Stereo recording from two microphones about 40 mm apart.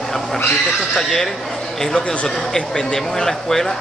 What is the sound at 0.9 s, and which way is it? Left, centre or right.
Speech, centre.